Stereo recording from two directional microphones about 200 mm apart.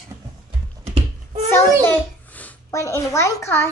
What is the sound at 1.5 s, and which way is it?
Babbling, 10° left (ahead or behind).